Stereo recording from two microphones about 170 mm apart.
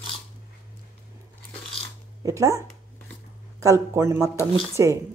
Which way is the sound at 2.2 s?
20° right (ahead or behind).